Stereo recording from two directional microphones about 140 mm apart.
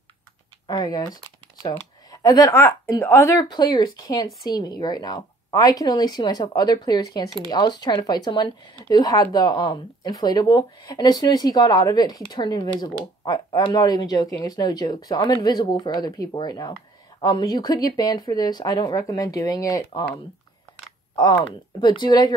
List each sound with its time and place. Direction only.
0.7 s speech: 30° left (ahead or behind)
21.8 s speech: 30° left (ahead or behind)